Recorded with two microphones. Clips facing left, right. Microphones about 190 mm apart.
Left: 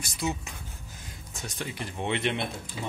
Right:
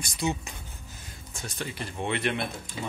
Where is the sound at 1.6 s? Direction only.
15° left (ahead or behind).